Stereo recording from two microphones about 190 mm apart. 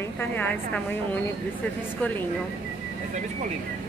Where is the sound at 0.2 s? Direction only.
10° left (ahead or behind).